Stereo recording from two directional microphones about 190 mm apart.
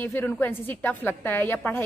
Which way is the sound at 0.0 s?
10° left (ahead or behind).